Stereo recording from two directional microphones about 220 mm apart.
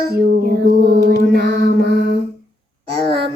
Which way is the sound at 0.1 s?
45° right (ahead or behind).